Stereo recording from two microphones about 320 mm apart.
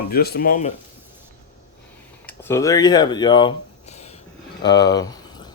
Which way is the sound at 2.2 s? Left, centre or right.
Centre.